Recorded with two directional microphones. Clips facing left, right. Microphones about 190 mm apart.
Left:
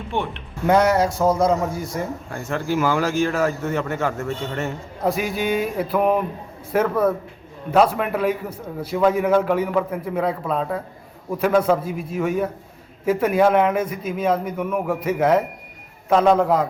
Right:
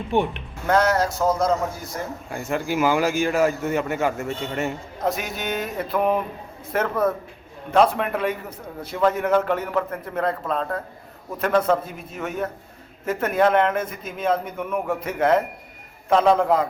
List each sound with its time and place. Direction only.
0.1 s a man's voice: 15° right (ahead or behind)
0.9 s a man's voice: centre (ahead or behind)
5.0 s a man's voice: centre (ahead or behind)